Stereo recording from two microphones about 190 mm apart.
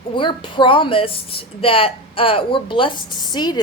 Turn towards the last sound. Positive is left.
turn(degrees=20)  # may be behind; listen again after turning